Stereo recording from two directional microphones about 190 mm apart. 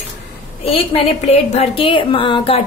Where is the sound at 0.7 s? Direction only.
30° left (ahead or behind).